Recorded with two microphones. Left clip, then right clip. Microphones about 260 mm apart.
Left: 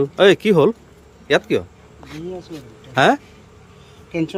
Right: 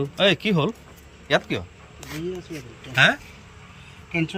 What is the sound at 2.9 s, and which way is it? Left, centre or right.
Speech, centre.